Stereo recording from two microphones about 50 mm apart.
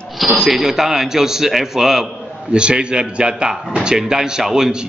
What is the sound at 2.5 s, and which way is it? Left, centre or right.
A man's voice, centre.